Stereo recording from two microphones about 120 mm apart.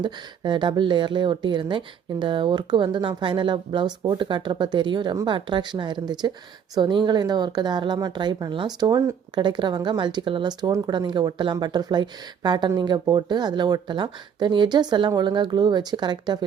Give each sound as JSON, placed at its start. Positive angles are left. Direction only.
{"t": 0.0, "sound": "speech", "side_deg": -40}
{"t": 9.3, "sound": "speech", "side_deg": -40}